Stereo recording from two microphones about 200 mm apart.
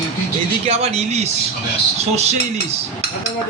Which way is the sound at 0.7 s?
30° right (ahead or behind).